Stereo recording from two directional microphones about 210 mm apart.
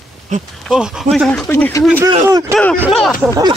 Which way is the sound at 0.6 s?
5° right (ahead or behind).